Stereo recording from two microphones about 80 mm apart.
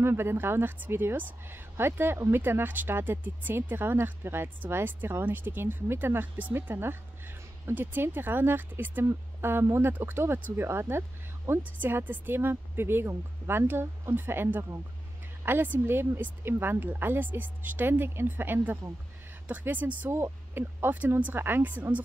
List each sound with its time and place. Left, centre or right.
0.0 s a woman's voice: right
20.1 s a woman's voice: right